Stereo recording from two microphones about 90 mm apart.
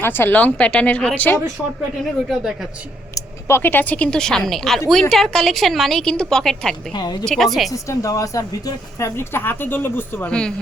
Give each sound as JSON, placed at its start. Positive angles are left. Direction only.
{"t": 0.0, "sound": "speech", "side_deg": 25}
{"t": 1.6, "sound": "a woman's voice", "side_deg": 5}
{"t": 3.2, "sound": "a woman's voice", "side_deg": 30}
{"t": 6.9, "sound": "a woman's voice", "side_deg": 50}
{"t": 7.3, "sound": "a woman's voice", "side_deg": 0}
{"t": 7.7, "sound": "a woman's voice", "side_deg": 35}